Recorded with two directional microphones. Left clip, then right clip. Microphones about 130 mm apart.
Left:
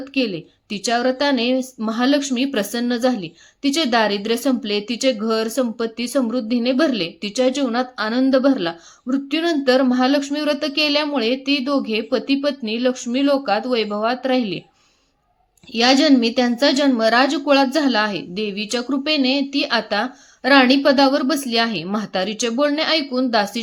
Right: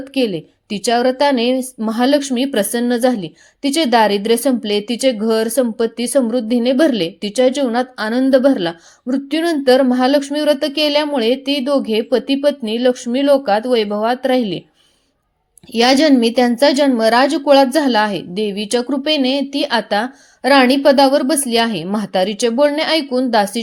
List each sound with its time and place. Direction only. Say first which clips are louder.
0.0 s a woman's voice: right 4 dB; 40° right (ahead or behind)
15.7 s a woman's voice: right 3 dB; 40° right (ahead or behind)